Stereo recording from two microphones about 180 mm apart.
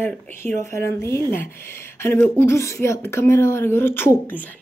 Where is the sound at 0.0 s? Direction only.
10° left (ahead or behind).